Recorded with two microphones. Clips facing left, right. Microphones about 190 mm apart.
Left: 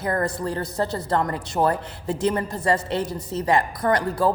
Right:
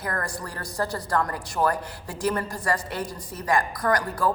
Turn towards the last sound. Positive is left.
turn(degrees=25)  # may be behind; listen again after turning